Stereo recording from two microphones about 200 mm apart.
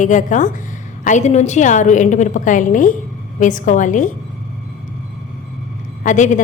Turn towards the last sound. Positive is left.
turn(degrees=40)  # may be behind; listen again after turning